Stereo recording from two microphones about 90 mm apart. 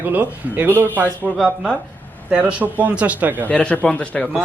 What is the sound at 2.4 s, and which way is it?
Speech, 15° right (ahead or behind).